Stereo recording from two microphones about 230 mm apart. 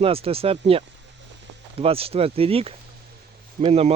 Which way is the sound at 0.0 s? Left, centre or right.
Right.